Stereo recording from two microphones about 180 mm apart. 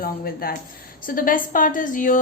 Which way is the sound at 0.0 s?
55° left (ahead or behind).